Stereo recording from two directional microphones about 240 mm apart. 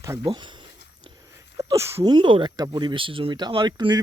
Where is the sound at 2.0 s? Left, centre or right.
Centre.